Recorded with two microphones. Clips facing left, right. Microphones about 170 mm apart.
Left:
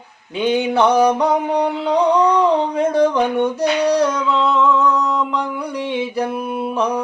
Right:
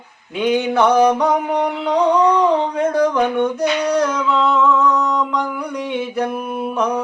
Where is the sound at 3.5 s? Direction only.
30° left (ahead or behind).